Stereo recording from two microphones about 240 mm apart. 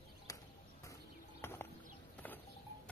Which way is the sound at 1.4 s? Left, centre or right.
Centre.